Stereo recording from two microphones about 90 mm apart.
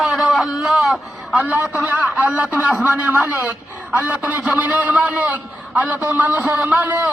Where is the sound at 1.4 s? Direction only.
15° right (ahead or behind).